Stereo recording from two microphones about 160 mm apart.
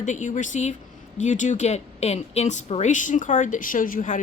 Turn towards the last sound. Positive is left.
turn(degrees=55)  # may be behind; listen again after turning